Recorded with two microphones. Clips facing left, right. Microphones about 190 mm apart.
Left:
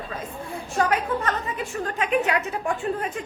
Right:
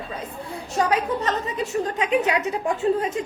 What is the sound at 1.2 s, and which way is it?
A woman's voice, 20° right (ahead or behind).